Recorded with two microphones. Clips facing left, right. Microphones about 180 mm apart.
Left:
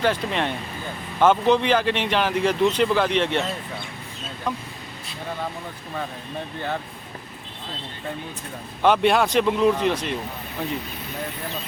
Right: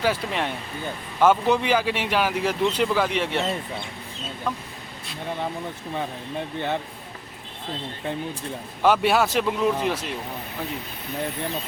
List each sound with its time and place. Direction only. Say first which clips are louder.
0.0 s speech: left 2 dB; 5° right (ahead or behind)
4.5 s speech: left 1 dB; centre (ahead or behind)
8.8 s speech: left 1 dB; 5° right (ahead or behind)